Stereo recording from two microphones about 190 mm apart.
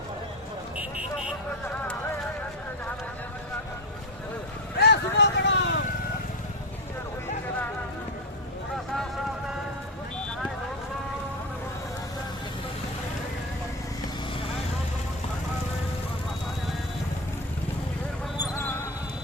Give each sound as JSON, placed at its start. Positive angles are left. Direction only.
{"t": 1.6, "sound": "clip-clop", "side_deg": 10}
{"t": 4.8, "sound": "vehicle", "side_deg": 65}